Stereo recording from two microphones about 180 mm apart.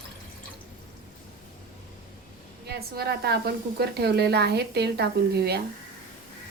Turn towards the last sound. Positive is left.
turn(degrees=-65)  # may be behind; listen again after turning